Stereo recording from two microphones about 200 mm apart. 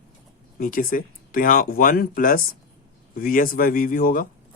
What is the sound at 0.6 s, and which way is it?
Speech, 45° left (ahead or behind).